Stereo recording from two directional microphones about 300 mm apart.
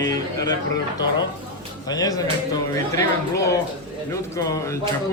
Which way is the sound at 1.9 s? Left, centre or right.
Centre.